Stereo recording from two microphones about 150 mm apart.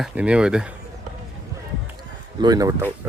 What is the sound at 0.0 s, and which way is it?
Speech, 5° right (ahead or behind).